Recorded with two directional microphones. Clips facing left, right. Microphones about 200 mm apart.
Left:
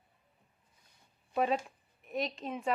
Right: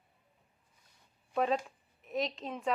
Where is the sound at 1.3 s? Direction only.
5° left (ahead or behind).